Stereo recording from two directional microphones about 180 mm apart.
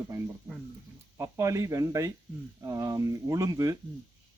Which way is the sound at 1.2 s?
15° right (ahead or behind).